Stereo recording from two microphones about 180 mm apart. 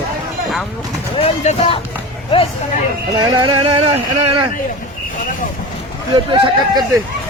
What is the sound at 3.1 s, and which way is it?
Speech, 25° right (ahead or behind).